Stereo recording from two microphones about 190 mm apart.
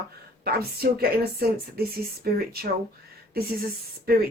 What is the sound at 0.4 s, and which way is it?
Speech, 55° right (ahead or behind).